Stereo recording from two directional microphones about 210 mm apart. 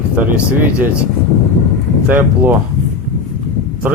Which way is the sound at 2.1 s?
10° right (ahead or behind).